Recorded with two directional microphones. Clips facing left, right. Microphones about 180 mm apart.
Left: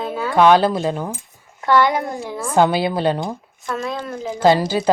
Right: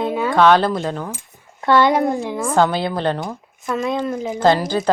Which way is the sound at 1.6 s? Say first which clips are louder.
Right 2 dB; 20° right (ahead or behind).